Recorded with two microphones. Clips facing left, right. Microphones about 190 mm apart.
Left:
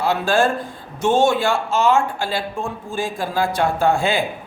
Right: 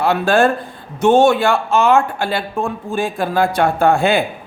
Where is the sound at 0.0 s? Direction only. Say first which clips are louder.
Right 4 dB; 60° right (ahead or behind).